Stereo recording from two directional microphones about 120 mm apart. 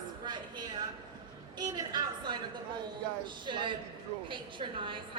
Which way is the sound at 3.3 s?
40° right (ahead or behind).